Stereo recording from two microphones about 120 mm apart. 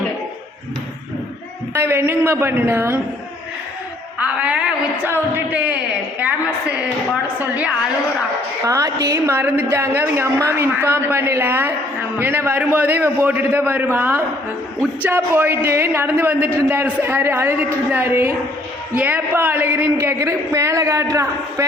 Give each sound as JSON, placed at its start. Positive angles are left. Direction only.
{"t": 1.7, "sound": "a woman's voice", "side_deg": -20}
{"t": 4.2, "sound": "a man's voice", "side_deg": -10}
{"t": 8.6, "sound": "a woman's voice", "side_deg": -30}